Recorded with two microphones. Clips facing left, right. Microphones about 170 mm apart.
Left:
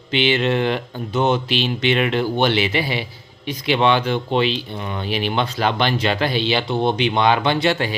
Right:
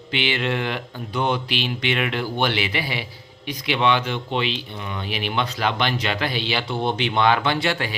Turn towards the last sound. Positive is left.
turn(degrees=25)  # may be behind; listen again after turning